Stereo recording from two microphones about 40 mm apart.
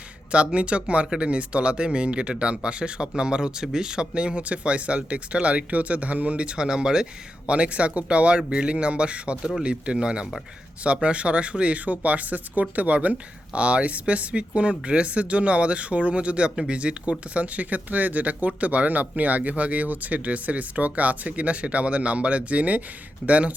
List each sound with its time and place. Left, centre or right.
0.3 s speech: right
7.4 s speech: right
11.9 s speech: right